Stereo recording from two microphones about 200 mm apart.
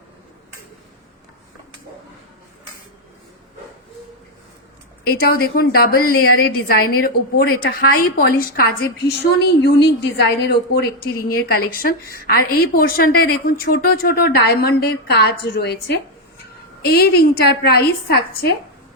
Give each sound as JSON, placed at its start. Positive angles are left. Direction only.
{"t": 5.0, "sound": "a woman's voice", "side_deg": 50}